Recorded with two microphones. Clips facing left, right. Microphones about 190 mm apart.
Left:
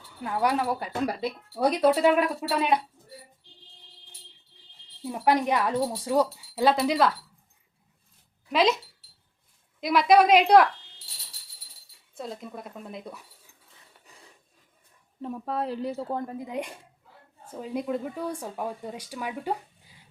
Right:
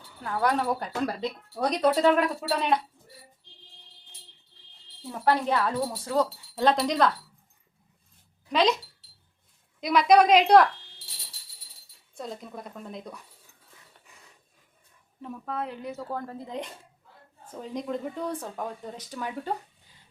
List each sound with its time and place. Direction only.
0.2 s speech: 15° left (ahead or behind)
5.1 s speech: 15° left (ahead or behind)
8.4 s speech: 5° left (ahead or behind)
9.8 s speech: centre (ahead or behind)
12.1 s speech: centre (ahead or behind)
14.1 s filing: 35° left (ahead or behind)
15.2 s speech: 35° left (ahead or behind); by 19.5 s 10° left (ahead or behind)